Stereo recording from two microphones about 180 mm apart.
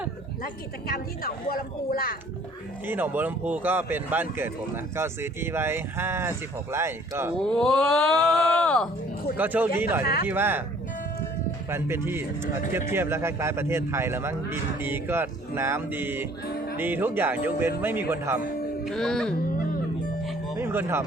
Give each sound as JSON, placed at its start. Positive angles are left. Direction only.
{"t": 0.9, "sound": "a woman's voice", "side_deg": 55}
{"t": 2.8, "sound": "speech", "side_deg": -10}
{"t": 7.3, "sound": "speech", "side_deg": 0}
{"t": 9.4, "sound": "speech", "side_deg": -10}
{"t": 10.0, "sound": "a woman's voice", "side_deg": 60}
{"t": 10.2, "sound": "speech", "side_deg": -10}
{"t": 11.7, "sound": "speech", "side_deg": -15}
{"t": 18.9, "sound": "speech", "side_deg": 0}
{"t": 19.4, "sound": "music", "side_deg": 50}
{"t": 20.6, "sound": "music", "side_deg": -15}